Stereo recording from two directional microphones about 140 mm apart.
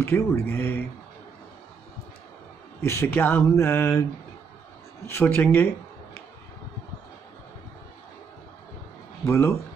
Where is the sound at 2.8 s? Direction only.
20° left (ahead or behind).